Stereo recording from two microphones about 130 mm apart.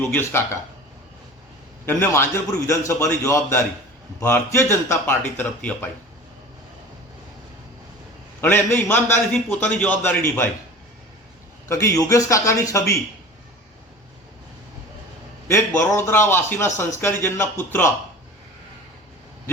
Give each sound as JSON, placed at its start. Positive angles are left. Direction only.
{"t": 0.0, "sound": "speech", "side_deg": 15}
{"t": 1.9, "sound": "speech", "side_deg": 20}
{"t": 8.4, "sound": "speech", "side_deg": 15}
{"t": 11.7, "sound": "speech", "side_deg": 25}
{"t": 15.4, "sound": "speech", "side_deg": 20}